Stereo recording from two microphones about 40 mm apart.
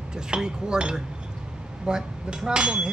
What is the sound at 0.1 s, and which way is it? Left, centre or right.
Speech, centre.